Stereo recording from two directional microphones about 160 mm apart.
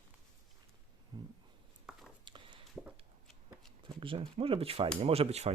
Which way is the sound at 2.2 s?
30° right (ahead or behind).